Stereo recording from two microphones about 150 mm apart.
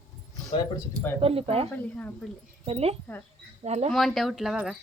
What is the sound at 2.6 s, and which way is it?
Speech, 40° right (ahead or behind).